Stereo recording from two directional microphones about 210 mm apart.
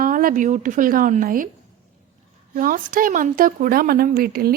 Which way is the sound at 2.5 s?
40° right (ahead or behind).